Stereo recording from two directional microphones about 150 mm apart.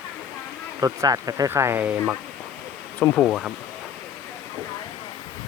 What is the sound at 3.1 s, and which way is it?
Speech, 5° left (ahead or behind).